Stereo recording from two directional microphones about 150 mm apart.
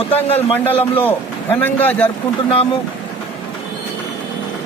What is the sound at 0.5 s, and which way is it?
Speech, 10° left (ahead or behind).